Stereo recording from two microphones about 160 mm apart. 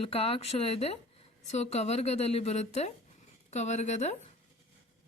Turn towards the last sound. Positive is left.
turn(degrees=45)  # may be behind; listen again after turning